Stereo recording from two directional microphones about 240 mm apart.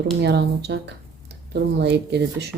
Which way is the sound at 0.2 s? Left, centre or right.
Right.